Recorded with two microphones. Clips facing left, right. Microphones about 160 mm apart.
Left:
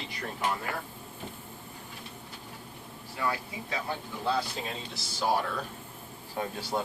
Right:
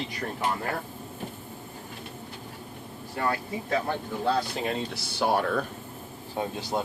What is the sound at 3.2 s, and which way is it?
Speech, 55° right (ahead or behind).